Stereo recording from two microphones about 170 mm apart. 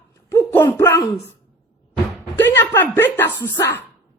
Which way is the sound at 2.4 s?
10° left (ahead or behind).